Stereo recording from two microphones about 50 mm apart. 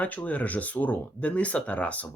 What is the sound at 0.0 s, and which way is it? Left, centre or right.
Speech, left.